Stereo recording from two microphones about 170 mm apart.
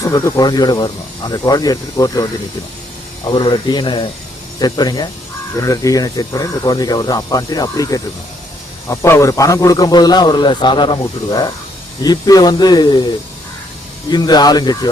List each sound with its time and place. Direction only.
0.0 s a man's voice: 20° left (ahead or behind)
3.2 s a man's voice: 25° left (ahead or behind)
14.1 s a man's voice: 25° left (ahead or behind)